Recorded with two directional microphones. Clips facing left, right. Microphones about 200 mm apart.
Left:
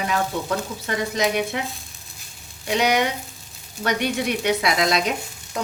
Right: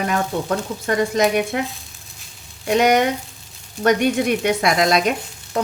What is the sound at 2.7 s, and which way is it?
Speech, 50° right (ahead or behind).